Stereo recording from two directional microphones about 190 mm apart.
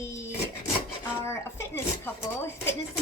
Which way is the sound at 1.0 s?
15° left (ahead or behind).